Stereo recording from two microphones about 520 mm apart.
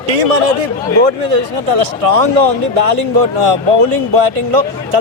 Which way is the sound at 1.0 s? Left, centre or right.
Right.